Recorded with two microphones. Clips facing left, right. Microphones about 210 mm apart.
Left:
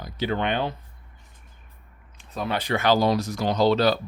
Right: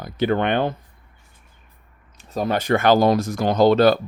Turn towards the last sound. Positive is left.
turn(degrees=-50)  # may be behind; listen again after turning